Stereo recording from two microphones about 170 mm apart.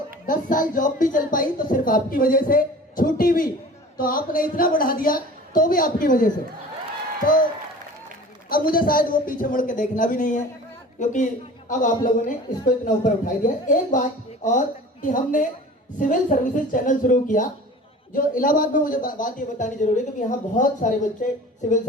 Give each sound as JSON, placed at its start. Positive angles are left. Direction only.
{"t": 0.3, "sound": "speech", "side_deg": 50}
{"t": 8.4, "sound": "speech", "side_deg": 60}